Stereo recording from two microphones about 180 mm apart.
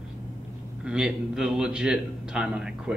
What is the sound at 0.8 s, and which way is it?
A man's voice, 5° right (ahead or behind).